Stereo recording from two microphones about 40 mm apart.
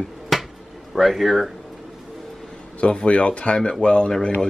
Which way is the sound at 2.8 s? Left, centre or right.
Left.